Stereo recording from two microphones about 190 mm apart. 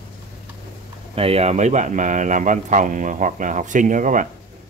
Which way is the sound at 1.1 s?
30° right (ahead or behind).